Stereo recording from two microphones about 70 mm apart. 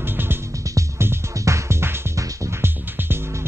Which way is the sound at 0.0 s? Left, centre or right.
Right.